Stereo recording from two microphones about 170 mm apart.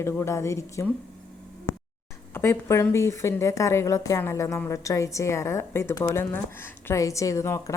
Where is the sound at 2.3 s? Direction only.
15° left (ahead or behind).